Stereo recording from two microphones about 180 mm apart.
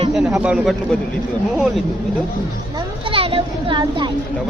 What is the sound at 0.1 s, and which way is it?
Speech, 5° right (ahead or behind).